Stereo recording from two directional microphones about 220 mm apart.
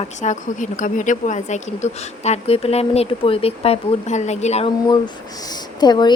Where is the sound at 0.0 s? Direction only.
35° left (ahead or behind).